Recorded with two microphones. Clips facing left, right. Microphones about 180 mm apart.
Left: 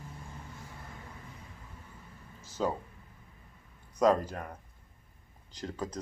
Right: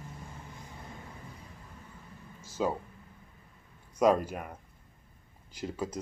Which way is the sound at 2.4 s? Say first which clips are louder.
Right 1 dB; 10° right (ahead or behind).